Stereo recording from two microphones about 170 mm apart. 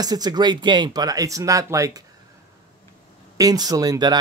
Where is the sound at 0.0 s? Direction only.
25° right (ahead or behind).